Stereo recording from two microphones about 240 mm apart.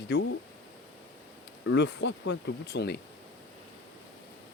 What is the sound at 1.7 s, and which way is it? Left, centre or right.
Speech, left.